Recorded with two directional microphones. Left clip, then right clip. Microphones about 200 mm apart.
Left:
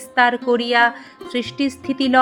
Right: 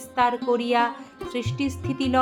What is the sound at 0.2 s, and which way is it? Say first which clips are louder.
Speech: left 6 dB; 25° left (ahead or behind).